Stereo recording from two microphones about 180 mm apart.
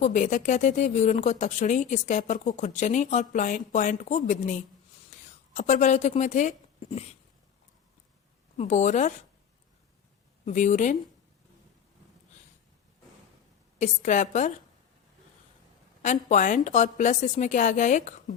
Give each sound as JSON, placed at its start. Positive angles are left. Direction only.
{"t": 0.0, "sound": "speech", "side_deg": 40}
{"t": 5.5, "sound": "a woman's voice", "side_deg": 45}
{"t": 8.5, "sound": "speech", "side_deg": 40}
{"t": 10.4, "sound": "a woman's voice", "side_deg": 40}
{"t": 13.7, "sound": "a woman's voice", "side_deg": 45}
{"t": 16.0, "sound": "a woman's voice", "side_deg": 45}